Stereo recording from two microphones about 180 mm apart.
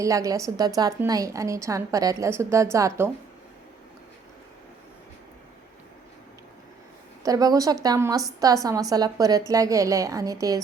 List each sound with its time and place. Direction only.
0.0 s a woman's voice: 20° right (ahead or behind)
7.2 s a woman's voice: 20° right (ahead or behind)